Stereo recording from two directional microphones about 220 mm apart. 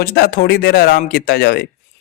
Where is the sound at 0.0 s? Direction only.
45° left (ahead or behind).